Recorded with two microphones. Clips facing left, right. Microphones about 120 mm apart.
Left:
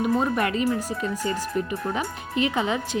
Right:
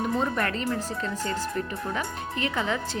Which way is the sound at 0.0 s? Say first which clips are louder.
Left 4 dB; 10° left (ahead or behind).